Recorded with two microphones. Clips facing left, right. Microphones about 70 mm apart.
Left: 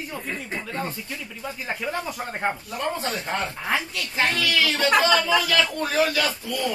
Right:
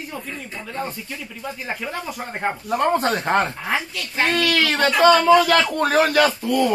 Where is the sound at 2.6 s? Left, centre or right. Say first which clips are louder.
Right 9 dB; right.